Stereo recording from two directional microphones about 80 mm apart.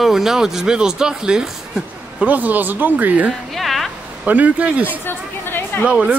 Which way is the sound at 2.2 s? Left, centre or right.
Right.